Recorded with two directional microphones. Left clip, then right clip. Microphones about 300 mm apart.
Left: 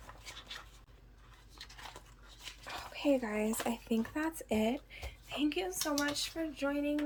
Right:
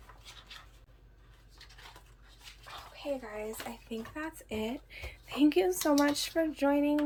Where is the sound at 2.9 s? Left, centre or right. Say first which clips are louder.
Left 5 dB; left.